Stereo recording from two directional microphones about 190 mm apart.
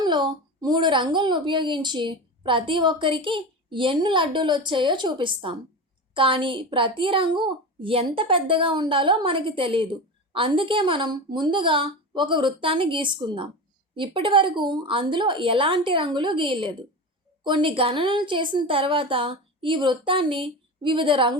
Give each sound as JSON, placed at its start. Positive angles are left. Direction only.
{"t": 0.0, "sound": "a woman's voice", "side_deg": -25}